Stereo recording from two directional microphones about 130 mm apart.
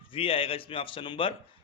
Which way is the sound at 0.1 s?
45° left (ahead or behind).